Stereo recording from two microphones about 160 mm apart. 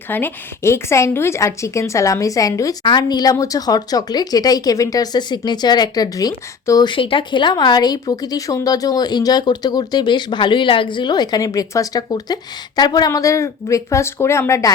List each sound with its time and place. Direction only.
0.1 s speech: 15° left (ahead or behind)